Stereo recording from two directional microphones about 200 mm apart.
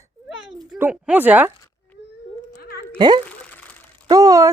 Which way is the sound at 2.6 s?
50° left (ahead or behind).